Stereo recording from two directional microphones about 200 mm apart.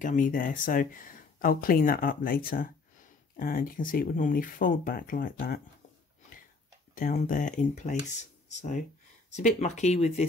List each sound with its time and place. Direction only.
0.0 s speech: 40° left (ahead or behind)
7.0 s speech: 40° left (ahead or behind)